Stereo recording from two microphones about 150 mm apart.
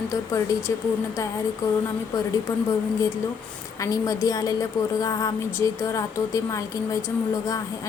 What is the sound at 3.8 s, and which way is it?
A woman's voice, 20° left (ahead or behind).